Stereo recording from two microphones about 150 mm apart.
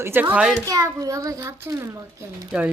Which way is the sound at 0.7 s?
25° right (ahead or behind).